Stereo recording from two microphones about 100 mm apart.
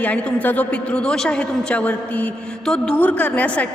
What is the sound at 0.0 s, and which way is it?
A woman's voice, 15° left (ahead or behind).